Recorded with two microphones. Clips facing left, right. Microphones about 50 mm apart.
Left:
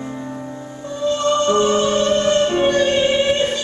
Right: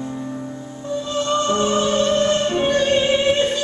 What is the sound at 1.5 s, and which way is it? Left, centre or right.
Music, centre.